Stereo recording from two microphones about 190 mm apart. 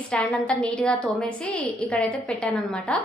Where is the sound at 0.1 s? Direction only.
5° left (ahead or behind).